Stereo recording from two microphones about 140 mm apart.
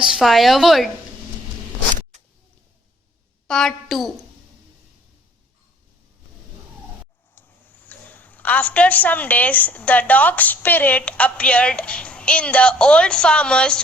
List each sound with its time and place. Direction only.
0.1 s a woman's voice: centre (ahead or behind)
2.1 s a sound: 55° right (ahead or behind)
3.4 s a woman's voice: 5° left (ahead or behind)
7.3 s a woman's voice: 15° left (ahead or behind)